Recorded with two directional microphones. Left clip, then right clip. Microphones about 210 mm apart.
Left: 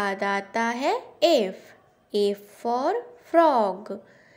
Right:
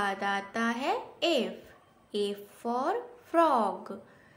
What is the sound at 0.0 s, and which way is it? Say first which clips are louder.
A woman's voice: left 5 dB; 25° left (ahead or behind).